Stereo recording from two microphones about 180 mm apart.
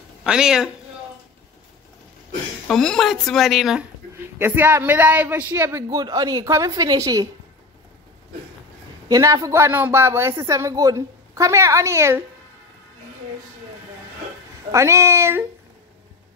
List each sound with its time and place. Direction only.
0.2 s speech: 5° right (ahead or behind)
2.7 s speech: 5° left (ahead or behind)
4.4 s a woman's voice: 10° right (ahead or behind)
9.1 s speech: 20° right (ahead or behind)
14.7 s speech: 15° right (ahead or behind)